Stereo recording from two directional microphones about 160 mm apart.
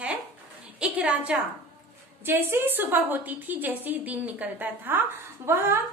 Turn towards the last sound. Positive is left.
turn(degrees=-15)  # may be behind; listen again after turning